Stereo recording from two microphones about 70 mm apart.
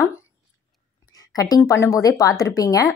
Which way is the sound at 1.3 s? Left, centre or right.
Left.